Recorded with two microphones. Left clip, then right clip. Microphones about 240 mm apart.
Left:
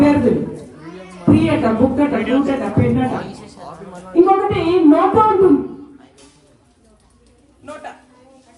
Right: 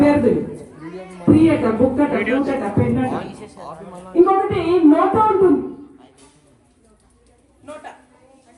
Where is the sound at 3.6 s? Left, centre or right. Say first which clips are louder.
Even; right.